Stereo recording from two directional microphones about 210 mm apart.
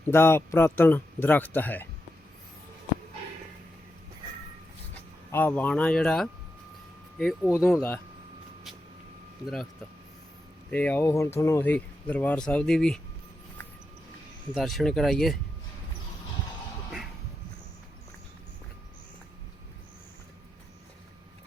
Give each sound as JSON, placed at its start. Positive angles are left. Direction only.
{"t": 0.0, "sound": "speech", "side_deg": 10}
{"t": 5.3, "sound": "speech", "side_deg": 10}
{"t": 7.4, "sound": "speech", "side_deg": 15}
{"t": 10.7, "sound": "speech", "side_deg": 5}
{"t": 14.5, "sound": "speech", "side_deg": 0}